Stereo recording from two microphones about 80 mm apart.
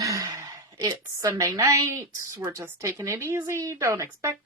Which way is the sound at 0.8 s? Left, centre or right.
Right.